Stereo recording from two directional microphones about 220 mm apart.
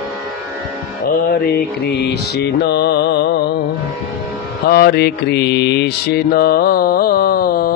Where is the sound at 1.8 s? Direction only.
50° left (ahead or behind).